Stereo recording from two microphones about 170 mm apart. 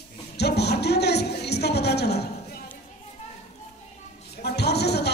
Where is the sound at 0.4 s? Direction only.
75° left (ahead or behind).